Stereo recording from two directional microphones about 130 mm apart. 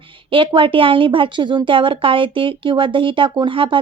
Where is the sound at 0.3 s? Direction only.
40° right (ahead or behind).